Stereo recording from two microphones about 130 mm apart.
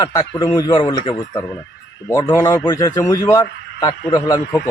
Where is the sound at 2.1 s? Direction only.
30° left (ahead or behind).